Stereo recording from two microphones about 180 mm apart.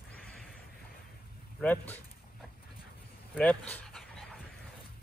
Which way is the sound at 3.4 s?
10° left (ahead or behind).